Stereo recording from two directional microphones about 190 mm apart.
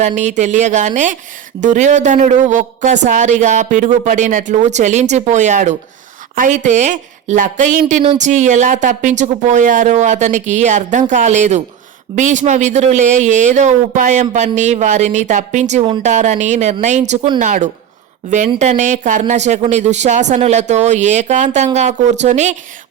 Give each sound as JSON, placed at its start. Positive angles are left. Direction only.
{"t": 0.0, "sound": "speech", "side_deg": -40}